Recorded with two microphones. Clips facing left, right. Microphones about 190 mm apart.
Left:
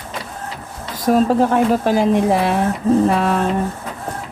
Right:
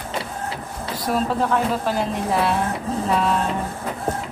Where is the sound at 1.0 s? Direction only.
45° left (ahead or behind).